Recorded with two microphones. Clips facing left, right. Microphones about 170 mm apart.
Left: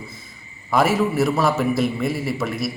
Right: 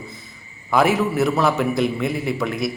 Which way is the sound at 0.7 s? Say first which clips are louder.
Right 1 dB; centre (ahead or behind).